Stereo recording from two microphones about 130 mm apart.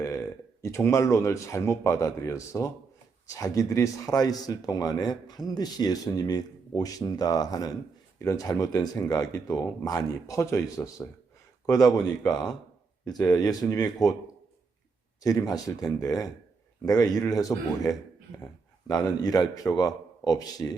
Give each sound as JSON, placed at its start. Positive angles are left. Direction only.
{"t": 0.6, "sound": "speech", "side_deg": 25}
{"t": 13.1, "sound": "speech", "side_deg": 30}
{"t": 15.2, "sound": "speech", "side_deg": 25}